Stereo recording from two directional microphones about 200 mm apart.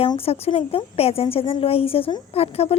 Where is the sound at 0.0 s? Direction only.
30° left (ahead or behind).